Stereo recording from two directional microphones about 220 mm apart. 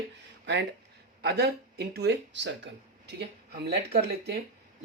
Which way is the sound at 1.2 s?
45° right (ahead or behind).